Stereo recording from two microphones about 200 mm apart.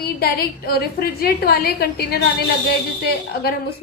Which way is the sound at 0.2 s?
50° left (ahead or behind).